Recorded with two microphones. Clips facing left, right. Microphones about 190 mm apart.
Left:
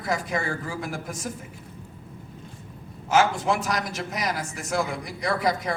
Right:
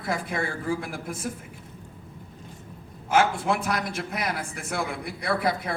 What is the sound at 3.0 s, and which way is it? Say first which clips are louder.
A man's voice: left 1 dB; 55° right (ahead or behind).